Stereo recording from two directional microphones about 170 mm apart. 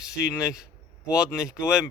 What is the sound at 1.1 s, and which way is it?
Speech, 20° left (ahead or behind).